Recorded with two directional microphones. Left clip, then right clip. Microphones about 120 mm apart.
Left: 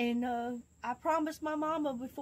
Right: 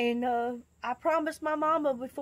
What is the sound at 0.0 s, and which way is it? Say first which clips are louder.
Speech: right 6 dB; 20° right (ahead or behind).